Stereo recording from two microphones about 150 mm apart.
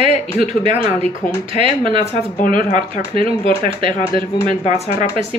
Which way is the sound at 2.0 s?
45° left (ahead or behind).